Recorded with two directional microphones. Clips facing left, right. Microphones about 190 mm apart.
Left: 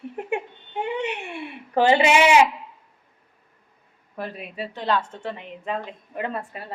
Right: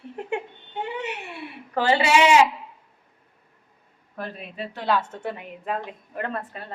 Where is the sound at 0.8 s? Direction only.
25° left (ahead or behind).